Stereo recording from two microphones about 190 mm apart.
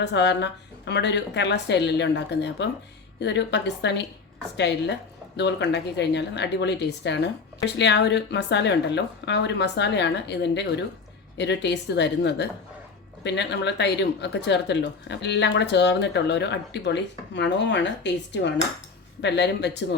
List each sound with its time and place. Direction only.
0.0 s speech: 65° left (ahead or behind)